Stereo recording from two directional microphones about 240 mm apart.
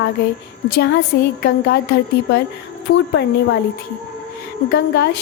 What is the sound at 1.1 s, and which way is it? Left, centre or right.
A woman's voice, left.